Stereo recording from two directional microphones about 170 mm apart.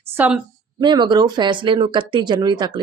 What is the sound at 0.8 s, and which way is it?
Speech, 25° right (ahead or behind).